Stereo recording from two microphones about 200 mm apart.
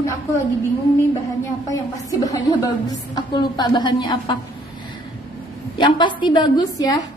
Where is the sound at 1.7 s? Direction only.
15° left (ahead or behind).